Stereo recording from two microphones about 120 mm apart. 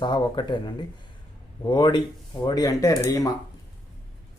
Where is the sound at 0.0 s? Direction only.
40° left (ahead or behind).